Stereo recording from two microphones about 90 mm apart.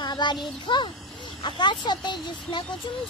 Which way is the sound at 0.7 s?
60° left (ahead or behind).